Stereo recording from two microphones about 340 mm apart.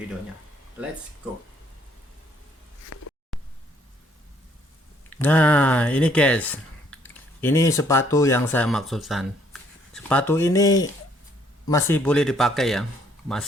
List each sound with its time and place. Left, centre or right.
2.9 s insect: left
5.0 s speech: centre